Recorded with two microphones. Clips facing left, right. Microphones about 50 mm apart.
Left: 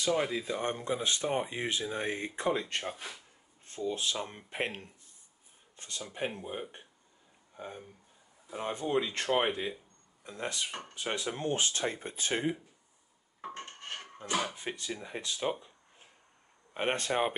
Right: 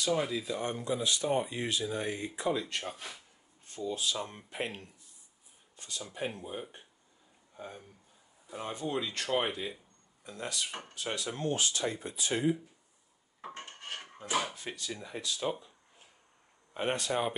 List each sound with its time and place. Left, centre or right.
0.2 s speech: left
2.8 s speech: centre
3.9 s speech: left
4.2 s speech: left
6.1 s speech: left
10.7 s speech: centre
11.0 s speech: left
13.4 s dishes: centre
14.5 s speech: left
16.7 s speech: left